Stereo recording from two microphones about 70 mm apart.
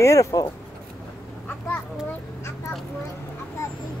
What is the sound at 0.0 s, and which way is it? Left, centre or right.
Speech, left.